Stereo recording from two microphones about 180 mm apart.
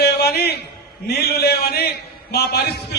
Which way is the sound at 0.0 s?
65° left (ahead or behind).